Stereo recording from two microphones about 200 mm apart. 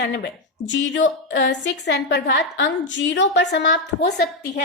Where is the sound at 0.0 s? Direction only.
55° left (ahead or behind).